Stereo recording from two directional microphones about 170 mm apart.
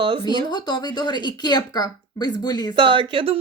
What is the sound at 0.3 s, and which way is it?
Speech, 25° left (ahead or behind).